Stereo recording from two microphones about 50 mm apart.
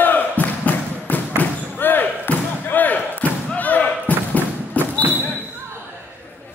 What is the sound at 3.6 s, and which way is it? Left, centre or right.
Basketball bounce, left.